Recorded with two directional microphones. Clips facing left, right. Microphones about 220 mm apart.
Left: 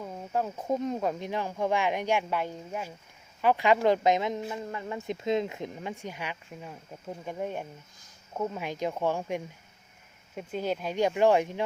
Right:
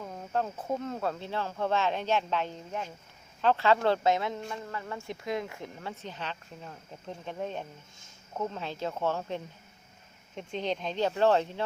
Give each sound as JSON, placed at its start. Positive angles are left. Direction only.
{"t": 0.0, "sound": "speech", "side_deg": 10}